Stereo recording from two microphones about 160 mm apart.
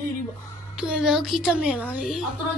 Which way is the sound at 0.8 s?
5° right (ahead or behind).